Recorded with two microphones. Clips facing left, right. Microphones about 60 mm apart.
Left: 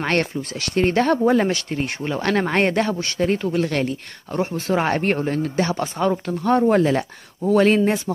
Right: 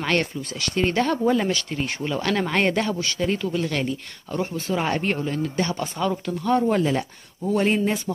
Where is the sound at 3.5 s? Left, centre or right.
Left.